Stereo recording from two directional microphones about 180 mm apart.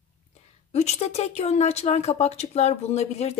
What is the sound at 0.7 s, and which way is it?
A woman's voice, 40° left (ahead or behind).